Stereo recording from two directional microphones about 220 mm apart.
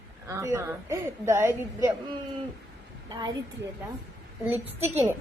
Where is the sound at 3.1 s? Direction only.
20° right (ahead or behind).